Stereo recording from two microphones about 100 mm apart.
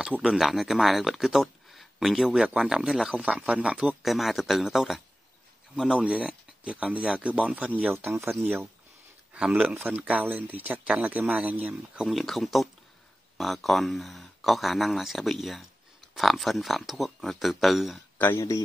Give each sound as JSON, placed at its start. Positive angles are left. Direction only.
{"t": 0.0, "sound": "speech", "side_deg": -5}
{"t": 4.0, "sound": "speech", "side_deg": 0}
{"t": 12.1, "sound": "speech", "side_deg": 0}
{"t": 18.1, "sound": "a sound", "side_deg": 20}